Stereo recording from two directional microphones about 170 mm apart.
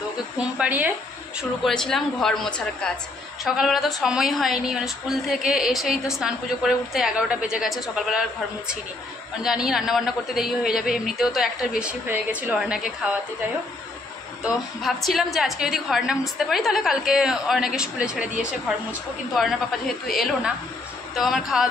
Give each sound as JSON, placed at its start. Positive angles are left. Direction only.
{"t": 0.4, "sound": "speech", "side_deg": -5}
{"t": 1.6, "sound": "a woman's voice", "side_deg": 5}
{"t": 14.4, "sound": "a woman's voice", "side_deg": 0}